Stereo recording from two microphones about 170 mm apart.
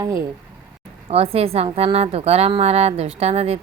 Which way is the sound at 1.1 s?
35° right (ahead or behind).